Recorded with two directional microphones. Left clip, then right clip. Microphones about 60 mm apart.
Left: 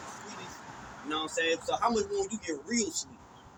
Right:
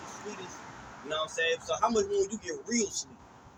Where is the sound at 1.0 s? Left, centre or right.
Right.